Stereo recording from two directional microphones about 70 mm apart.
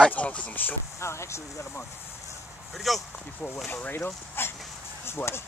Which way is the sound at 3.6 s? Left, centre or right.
Left.